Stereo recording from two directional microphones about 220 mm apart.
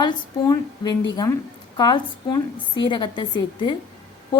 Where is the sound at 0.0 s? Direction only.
20° left (ahead or behind).